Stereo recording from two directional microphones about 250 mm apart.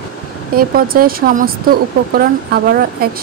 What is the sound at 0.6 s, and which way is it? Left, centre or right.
Speech, right.